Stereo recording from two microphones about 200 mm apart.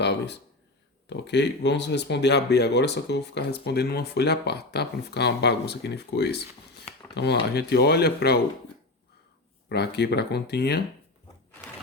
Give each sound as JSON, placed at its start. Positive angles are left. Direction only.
{"t": 0.0, "sound": "a sound", "side_deg": 60}
{"t": 1.1, "sound": "speech", "side_deg": 60}
{"t": 9.6, "sound": "speech", "side_deg": 55}